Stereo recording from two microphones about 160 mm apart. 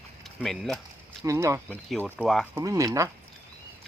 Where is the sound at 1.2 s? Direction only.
20° right (ahead or behind).